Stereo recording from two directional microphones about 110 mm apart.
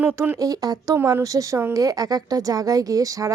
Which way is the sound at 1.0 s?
25° right (ahead or behind).